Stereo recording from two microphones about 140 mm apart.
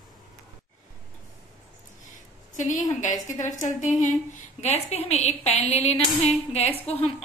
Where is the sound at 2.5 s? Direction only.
65° left (ahead or behind).